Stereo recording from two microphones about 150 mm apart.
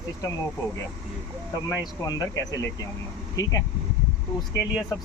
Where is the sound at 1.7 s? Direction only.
25° left (ahead or behind).